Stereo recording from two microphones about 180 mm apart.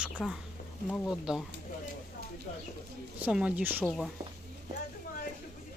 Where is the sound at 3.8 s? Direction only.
5° left (ahead or behind).